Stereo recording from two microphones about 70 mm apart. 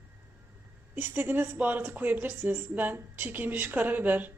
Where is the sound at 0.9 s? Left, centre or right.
Right.